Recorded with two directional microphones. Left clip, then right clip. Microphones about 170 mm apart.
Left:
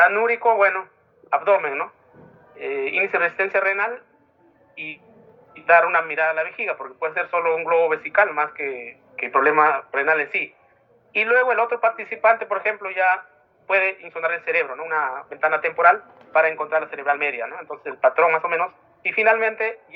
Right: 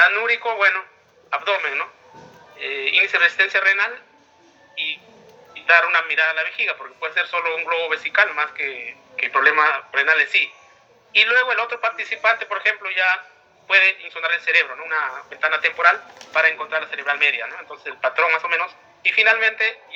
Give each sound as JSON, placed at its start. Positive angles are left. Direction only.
{"t": 0.0, "sound": "a man's voice", "side_deg": 40}
{"t": 5.6, "sound": "a man's voice", "side_deg": 40}